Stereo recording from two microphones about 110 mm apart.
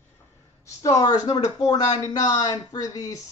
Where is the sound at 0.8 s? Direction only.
30° left (ahead or behind).